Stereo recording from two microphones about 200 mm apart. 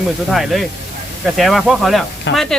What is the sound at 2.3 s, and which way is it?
Speech, 60° left (ahead or behind).